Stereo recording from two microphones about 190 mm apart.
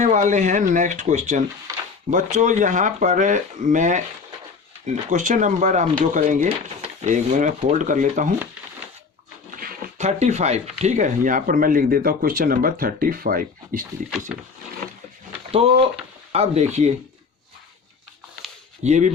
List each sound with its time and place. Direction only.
0.0 s speech: 40° right (ahead or behind)
5.0 s speech: 40° right (ahead or behind)
9.5 s speech: 50° right (ahead or behind)
15.5 s speech: 30° right (ahead or behind)
18.8 s speech: 40° right (ahead or behind)